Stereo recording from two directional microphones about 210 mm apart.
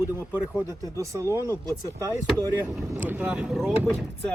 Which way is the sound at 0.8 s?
15° right (ahead or behind).